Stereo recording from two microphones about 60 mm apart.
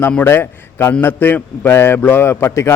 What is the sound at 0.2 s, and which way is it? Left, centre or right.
A man's voice, left.